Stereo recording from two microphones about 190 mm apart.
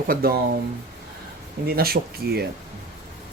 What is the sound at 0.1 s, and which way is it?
Speech, 50° right (ahead or behind).